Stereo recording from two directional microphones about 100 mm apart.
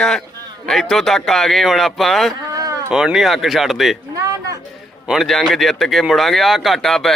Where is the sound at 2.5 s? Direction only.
35° right (ahead or behind).